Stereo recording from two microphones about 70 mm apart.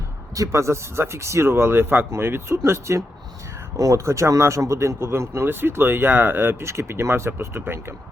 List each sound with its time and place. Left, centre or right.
0.3 s speech: right